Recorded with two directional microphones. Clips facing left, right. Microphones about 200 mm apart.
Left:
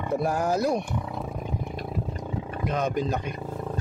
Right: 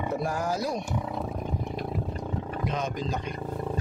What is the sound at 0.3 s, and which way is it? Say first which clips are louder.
Speech: left 5 dB; 55° left (ahead or behind).